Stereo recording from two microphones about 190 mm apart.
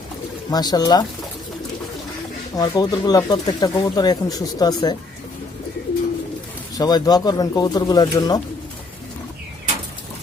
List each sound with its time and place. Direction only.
0.5 s speech: 20° left (ahead or behind)
2.6 s speech: 20° left (ahead or behind)
6.7 s speech: 20° left (ahead or behind)